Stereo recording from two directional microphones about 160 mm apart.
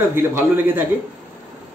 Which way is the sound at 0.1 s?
15° right (ahead or behind).